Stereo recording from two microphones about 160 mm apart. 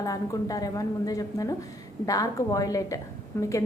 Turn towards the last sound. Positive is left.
turn(degrees=15)  # may be behind; listen again after turning